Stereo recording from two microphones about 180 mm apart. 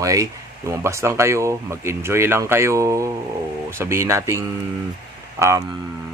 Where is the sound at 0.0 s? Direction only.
15° right (ahead or behind).